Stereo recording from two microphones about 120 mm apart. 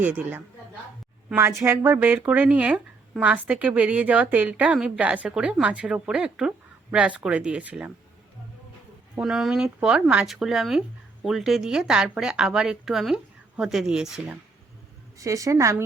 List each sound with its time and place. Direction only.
0.0 s speech: 15° right (ahead or behind)
9.1 s speech: 5° right (ahead or behind)
15.2 s a woman's voice: 25° right (ahead or behind)